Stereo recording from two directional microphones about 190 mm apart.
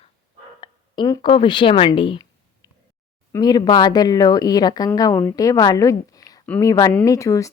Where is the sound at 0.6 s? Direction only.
20° left (ahead or behind).